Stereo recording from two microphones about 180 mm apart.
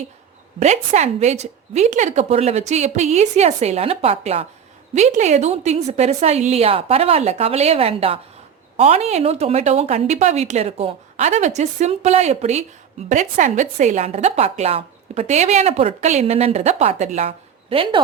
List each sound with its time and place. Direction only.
0.6 s a woman's voice: 40° right (ahead or behind)